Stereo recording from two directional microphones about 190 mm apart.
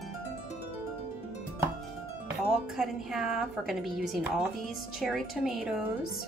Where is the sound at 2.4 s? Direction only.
5° right (ahead or behind).